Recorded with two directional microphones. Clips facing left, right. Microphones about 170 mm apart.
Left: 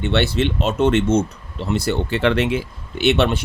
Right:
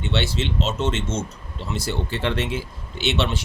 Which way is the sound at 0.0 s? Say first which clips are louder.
Left 6 dB; 60° left (ahead or behind).